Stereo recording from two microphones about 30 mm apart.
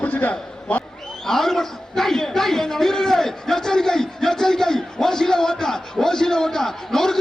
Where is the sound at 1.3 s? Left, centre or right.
Centre.